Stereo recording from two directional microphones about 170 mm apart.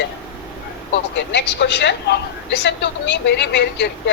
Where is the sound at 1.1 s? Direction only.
90° left.